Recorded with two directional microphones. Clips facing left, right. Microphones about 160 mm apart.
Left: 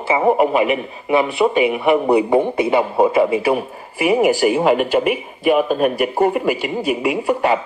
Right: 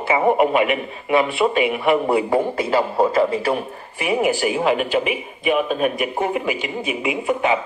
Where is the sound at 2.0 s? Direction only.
20° left (ahead or behind).